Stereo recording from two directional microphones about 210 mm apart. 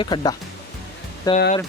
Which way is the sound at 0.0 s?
20° left (ahead or behind).